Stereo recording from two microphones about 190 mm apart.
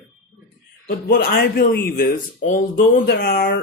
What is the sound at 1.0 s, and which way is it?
Speech, 50° left (ahead or behind).